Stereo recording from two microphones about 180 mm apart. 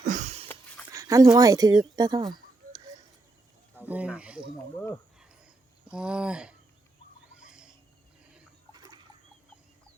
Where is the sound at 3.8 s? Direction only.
10° right (ahead or behind).